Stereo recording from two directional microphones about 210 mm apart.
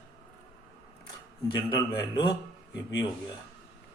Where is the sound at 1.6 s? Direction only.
20° left (ahead or behind).